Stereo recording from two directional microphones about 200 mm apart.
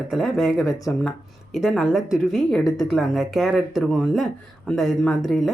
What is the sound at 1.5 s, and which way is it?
Speech, centre (ahead or behind).